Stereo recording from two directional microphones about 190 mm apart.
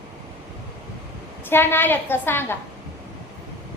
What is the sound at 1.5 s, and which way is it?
A woman's voice, 10° left (ahead or behind).